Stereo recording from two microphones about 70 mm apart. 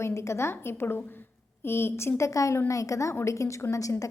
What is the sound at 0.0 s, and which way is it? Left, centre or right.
A woman's voice, left.